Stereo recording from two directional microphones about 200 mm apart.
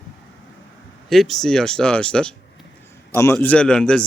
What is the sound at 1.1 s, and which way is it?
Speech, centre (ahead or behind).